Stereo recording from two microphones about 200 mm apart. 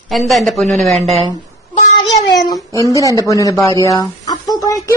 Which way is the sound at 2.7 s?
15° left (ahead or behind).